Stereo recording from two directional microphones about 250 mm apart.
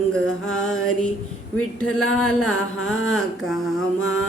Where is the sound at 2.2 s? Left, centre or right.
Centre.